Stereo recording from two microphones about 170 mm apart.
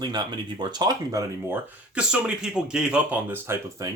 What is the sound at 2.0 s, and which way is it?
Speech, 5° right (ahead or behind).